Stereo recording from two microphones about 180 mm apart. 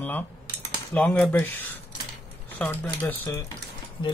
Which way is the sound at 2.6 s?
10° left (ahead or behind).